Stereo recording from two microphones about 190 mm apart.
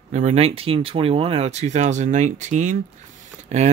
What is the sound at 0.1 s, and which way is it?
Speech, 35° right (ahead or behind).